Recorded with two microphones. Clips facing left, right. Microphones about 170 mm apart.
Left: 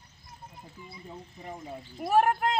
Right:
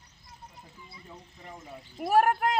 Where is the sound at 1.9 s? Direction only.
5° right (ahead or behind).